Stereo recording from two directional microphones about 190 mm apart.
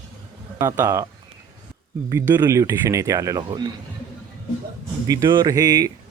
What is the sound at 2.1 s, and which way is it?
Speech, 15° right (ahead or behind).